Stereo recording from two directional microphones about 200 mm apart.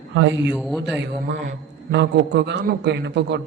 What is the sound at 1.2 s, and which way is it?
A man's voice, 55° right (ahead or behind).